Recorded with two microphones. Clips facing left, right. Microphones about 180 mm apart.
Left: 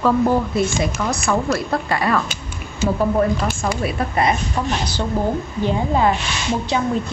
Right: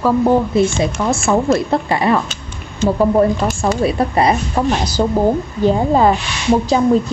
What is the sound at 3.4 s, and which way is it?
A woman's voice, 30° right (ahead or behind).